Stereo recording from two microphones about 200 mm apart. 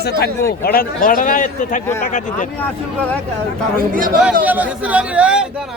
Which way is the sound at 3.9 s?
45° right (ahead or behind).